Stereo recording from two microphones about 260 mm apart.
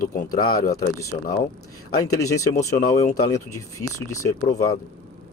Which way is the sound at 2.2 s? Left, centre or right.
Left.